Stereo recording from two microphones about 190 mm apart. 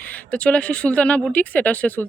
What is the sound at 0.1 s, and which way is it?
Speech, 5° left (ahead or behind).